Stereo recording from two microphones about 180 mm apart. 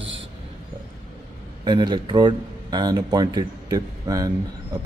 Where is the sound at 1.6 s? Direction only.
25° right (ahead or behind).